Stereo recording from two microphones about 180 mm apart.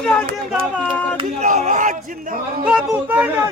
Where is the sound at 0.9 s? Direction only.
10° left (ahead or behind).